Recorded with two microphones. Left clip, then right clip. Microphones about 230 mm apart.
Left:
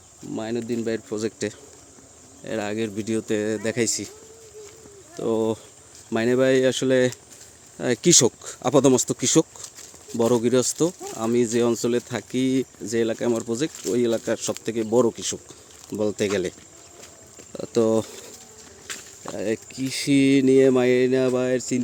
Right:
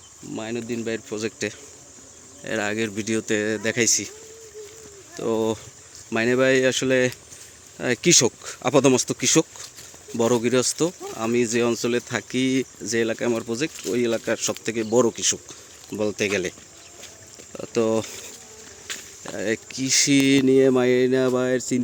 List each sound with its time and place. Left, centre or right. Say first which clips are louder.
0.3 s speech: left 2 dB; centre
2.4 s speech: right 2 dB; centre
5.1 s speech: even; centre
17.5 s a sound: left 1 dB; centre
19.2 s speech: right 1 dB; centre